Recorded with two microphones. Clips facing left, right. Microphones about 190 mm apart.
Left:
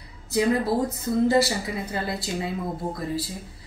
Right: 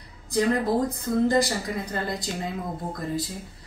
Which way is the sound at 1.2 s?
5° left (ahead or behind).